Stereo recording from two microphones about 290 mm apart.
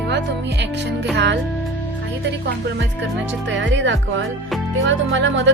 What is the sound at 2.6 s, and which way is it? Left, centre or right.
Speech, right.